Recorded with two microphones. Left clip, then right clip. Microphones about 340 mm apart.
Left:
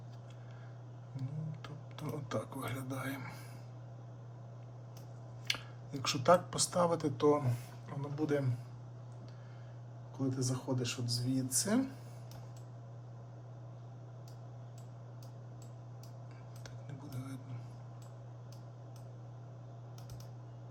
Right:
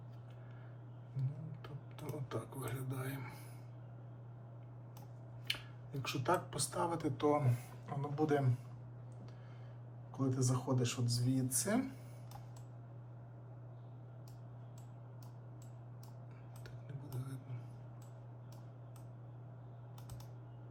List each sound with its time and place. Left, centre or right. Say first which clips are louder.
1.6 s speech: left 2 dB; centre
5.5 s speech: left 4 dB; centre
10.2 s speech: even; centre